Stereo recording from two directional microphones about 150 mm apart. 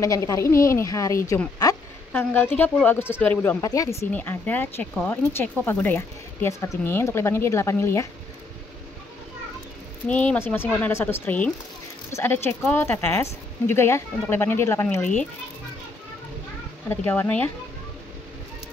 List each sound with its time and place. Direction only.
0.0 s speech: 20° left (ahead or behind)
1.6 s a sound: 25° left (ahead or behind)
2.1 s speech: 10° left (ahead or behind)
3.6 s speech: 25° left (ahead or behind)
10.0 s speech: 10° left (ahead or behind)
16.9 s speech: 10° left (ahead or behind)